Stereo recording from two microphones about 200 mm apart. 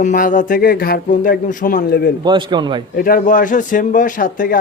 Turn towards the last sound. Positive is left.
turn(degrees=40)  # may be behind; listen again after turning